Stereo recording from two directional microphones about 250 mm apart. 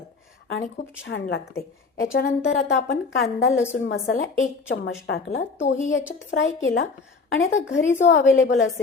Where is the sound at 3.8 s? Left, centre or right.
Left.